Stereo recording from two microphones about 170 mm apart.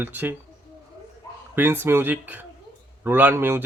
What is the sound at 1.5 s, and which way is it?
A man's voice, 15° right (ahead or behind).